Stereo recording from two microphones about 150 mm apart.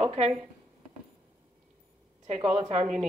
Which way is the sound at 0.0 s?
40° right (ahead or behind).